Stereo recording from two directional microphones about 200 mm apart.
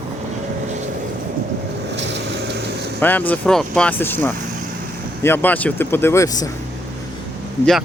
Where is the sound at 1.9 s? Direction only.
60° right (ahead or behind).